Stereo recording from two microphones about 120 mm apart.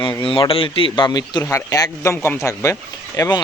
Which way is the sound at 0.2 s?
50° left (ahead or behind).